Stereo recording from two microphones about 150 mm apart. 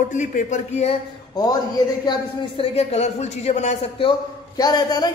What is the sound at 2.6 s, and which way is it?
Speech, 45° left (ahead or behind).